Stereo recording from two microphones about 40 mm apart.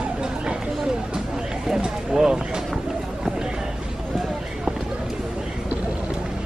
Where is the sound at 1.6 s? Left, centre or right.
Centre.